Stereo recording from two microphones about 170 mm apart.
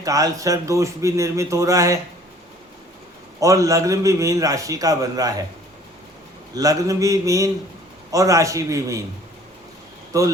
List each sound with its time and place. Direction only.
0.0 s a man's voice: 20° right (ahead or behind)
3.4 s a man's voice: 20° right (ahead or behind)
6.5 s a man's voice: 20° right (ahead or behind)
10.1 s speech: 20° right (ahead or behind)